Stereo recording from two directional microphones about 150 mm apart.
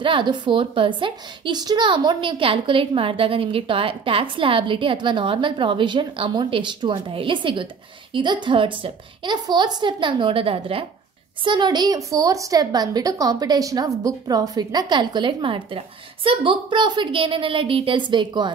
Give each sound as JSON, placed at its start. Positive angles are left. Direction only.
{"t": 0.0, "sound": "a woman's voice", "side_deg": -35}